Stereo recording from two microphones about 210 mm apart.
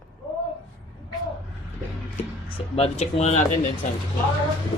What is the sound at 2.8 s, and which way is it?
Speech, 30° left (ahead or behind).